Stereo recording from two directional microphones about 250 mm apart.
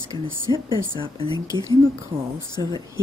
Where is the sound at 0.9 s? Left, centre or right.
Centre.